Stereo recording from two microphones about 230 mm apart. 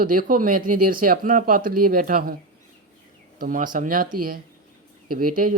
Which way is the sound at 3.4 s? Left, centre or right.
Right.